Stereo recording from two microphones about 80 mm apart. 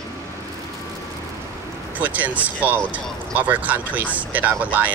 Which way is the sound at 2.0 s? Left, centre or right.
Centre.